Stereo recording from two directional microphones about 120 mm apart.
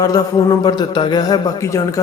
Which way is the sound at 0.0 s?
30° left (ahead or behind).